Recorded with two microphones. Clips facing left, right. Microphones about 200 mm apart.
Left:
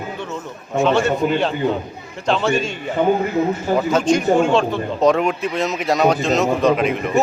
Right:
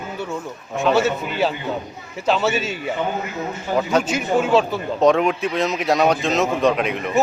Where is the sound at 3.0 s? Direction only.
50° left (ahead or behind).